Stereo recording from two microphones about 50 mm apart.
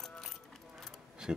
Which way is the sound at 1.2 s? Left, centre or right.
Centre.